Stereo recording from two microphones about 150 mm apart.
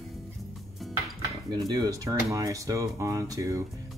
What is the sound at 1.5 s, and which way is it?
Speech, 25° right (ahead or behind).